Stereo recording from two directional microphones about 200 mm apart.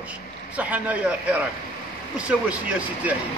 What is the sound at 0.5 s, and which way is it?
A man's voice, 5° right (ahead or behind).